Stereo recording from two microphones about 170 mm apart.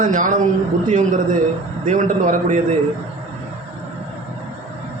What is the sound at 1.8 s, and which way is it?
Speech, 45° right (ahead or behind).